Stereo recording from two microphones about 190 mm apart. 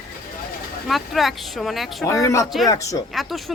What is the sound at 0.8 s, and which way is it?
Speech, centre (ahead or behind).